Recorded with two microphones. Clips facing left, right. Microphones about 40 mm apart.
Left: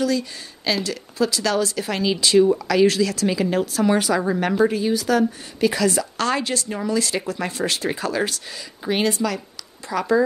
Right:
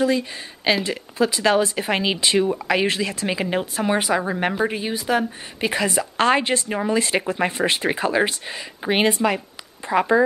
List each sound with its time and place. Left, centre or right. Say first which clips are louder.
0.0 s speech: right 2 dB; right